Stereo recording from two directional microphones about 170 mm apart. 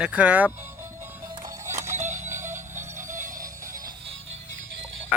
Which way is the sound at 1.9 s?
45° right (ahead or behind).